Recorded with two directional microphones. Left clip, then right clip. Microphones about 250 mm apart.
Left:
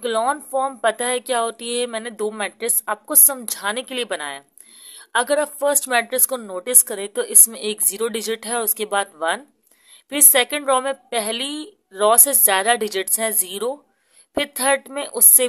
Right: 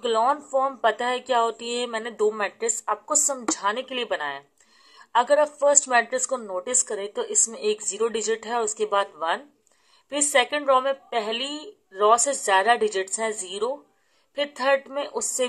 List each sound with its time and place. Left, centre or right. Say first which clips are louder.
0.0 s speech: left 1 dB; left